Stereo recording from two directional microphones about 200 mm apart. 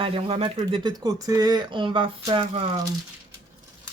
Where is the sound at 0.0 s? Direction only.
25° right (ahead or behind).